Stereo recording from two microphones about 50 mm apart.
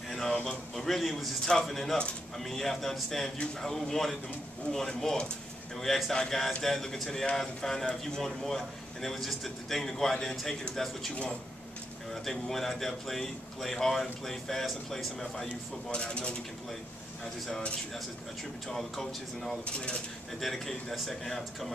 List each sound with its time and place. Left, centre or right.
0.1 s a man's voice: centre
12.1 s speech: centre
15.9 s speech: centre
18.7 s speech: centre
19.6 s speech: left
20.3 s speech: centre